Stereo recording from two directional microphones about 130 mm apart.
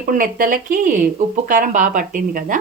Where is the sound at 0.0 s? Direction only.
90° right.